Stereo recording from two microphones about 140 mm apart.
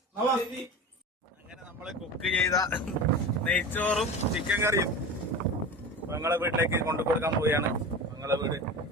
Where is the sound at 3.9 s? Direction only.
10° right (ahead or behind).